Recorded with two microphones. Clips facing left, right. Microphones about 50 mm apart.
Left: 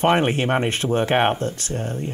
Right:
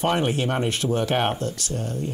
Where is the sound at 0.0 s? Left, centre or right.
Left.